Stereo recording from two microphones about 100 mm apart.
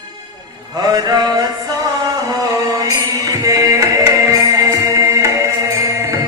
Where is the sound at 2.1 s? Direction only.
35° right (ahead or behind).